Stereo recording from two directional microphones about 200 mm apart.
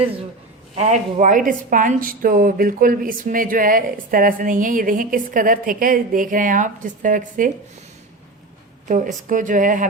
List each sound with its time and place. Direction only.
0.8 s a woman's voice: 35° right (ahead or behind)
8.9 s speech: 40° right (ahead or behind)